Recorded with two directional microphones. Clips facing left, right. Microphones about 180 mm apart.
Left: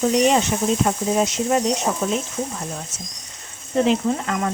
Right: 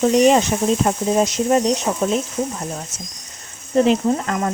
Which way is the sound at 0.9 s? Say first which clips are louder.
Right 2 dB; 40° right (ahead or behind).